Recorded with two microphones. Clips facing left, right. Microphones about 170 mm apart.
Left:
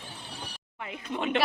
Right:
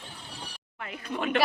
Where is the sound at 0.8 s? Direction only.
20° left (ahead or behind).